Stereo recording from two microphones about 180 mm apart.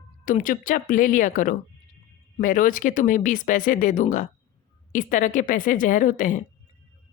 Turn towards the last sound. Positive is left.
turn(degrees=45)  # may be behind; listen again after turning